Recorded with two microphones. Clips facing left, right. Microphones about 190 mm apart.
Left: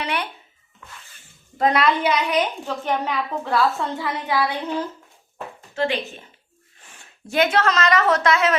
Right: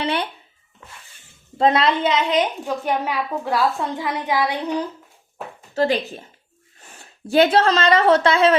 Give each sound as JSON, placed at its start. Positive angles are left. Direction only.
{"t": 0.0, "sound": "a sound", "side_deg": -30}
{"t": 1.5, "sound": "a woman's voice", "side_deg": -25}
{"t": 5.7, "sound": "speech", "side_deg": -40}